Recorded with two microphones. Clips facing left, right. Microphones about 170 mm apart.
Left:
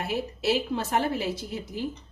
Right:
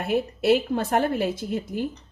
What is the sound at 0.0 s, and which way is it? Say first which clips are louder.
A woman's voice: right 5 dB; 55° right (ahead or behind).